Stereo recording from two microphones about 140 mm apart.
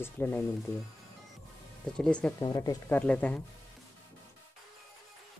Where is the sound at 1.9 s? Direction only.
5° left (ahead or behind).